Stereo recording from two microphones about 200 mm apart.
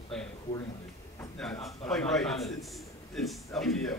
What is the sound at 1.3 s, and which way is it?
A man's voice, 5° left (ahead or behind).